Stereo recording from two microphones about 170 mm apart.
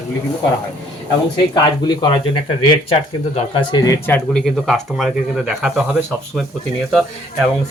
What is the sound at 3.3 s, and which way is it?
Speech, 30° left (ahead or behind).